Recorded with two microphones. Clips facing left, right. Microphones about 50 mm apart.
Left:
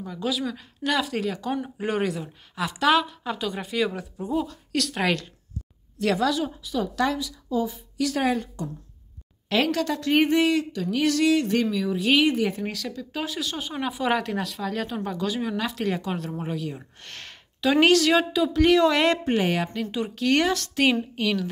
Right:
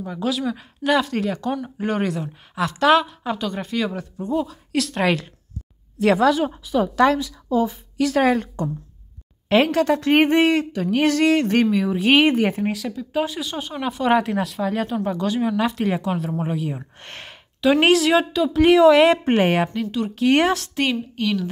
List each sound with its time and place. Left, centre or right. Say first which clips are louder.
0.2 s speech: right 4 dB; centre
5.9 s a woman's voice: right 6 dB; right
8.2 s a woman's voice: right 7 dB; right
9.5 s a woman's voice: right 6 dB; right
12.7 s a woman's voice: right 7 dB; centre
18.3 s speech: right 4 dB; centre
19.2 s a woman's voice: right 5 dB; right
20.7 s speech: left 1 dB; centre